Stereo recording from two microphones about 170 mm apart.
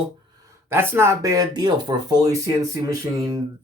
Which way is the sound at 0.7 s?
15° right (ahead or behind).